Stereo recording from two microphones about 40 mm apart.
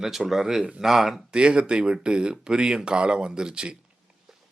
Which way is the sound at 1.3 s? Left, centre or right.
Right.